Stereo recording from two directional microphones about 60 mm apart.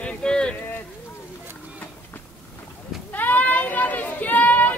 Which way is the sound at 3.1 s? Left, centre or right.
Left.